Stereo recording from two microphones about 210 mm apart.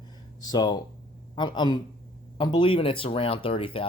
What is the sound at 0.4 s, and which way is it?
Speech, 20° left (ahead or behind).